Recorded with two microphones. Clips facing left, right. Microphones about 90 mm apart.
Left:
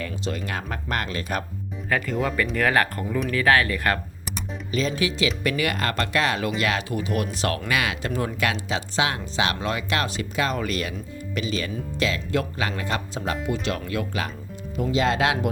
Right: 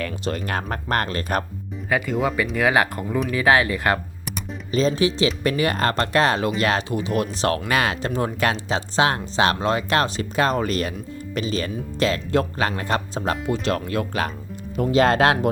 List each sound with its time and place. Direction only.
0.3 s speech: 50° right (ahead or behind)
1.9 s speech: 5° right (ahead or behind)
4.7 s speech: 35° right (ahead or behind)